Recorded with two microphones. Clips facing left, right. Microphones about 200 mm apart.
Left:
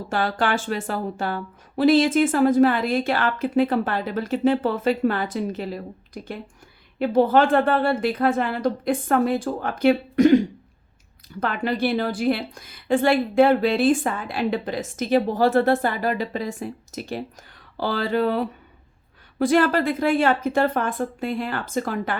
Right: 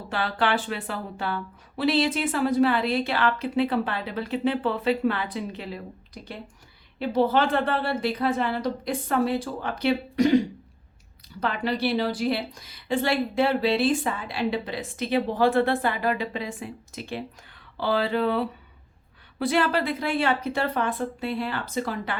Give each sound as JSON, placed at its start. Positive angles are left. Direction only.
{"t": 0.1, "sound": "a woman's voice", "side_deg": 45}
{"t": 7.0, "sound": "a woman's voice", "side_deg": 50}
{"t": 11.3, "sound": "a woman's voice", "side_deg": 50}